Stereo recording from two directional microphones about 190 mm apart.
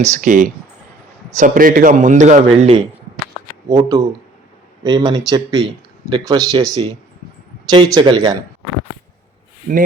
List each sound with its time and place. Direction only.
0.1 s a man's voice: 40° right (ahead or behind)
3.7 s speech: 15° right (ahead or behind)
9.7 s speech: 45° right (ahead or behind)